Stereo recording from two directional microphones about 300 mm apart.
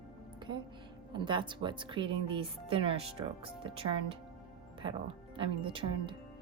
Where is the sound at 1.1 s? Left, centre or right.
Centre.